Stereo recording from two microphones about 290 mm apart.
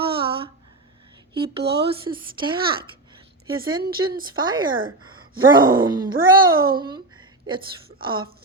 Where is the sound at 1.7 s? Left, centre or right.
Centre.